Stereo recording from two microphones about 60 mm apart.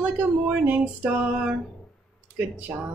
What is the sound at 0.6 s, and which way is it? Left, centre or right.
Speech, right.